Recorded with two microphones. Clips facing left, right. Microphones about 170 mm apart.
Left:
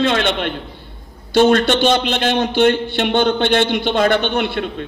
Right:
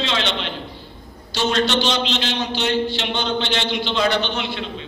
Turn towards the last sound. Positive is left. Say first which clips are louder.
# left 6 dB
turn(degrees=55)  # may be behind; listen again after turning